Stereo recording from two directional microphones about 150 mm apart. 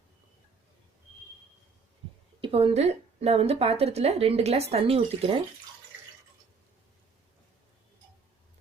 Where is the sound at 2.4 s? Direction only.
40° right (ahead or behind).